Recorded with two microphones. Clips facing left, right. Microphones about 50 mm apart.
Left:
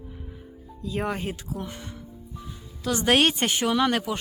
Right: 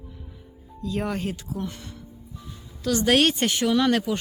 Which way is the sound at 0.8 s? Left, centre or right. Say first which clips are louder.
Right 1 dB; centre.